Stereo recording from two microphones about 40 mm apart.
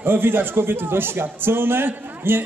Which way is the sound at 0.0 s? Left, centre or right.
Right.